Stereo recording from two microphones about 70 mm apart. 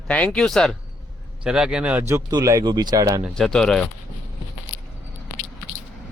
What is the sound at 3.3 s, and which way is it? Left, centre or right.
Speech, centre.